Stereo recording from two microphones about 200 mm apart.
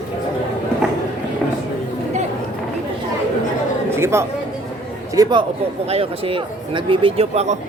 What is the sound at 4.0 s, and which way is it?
Speech, 15° right (ahead or behind).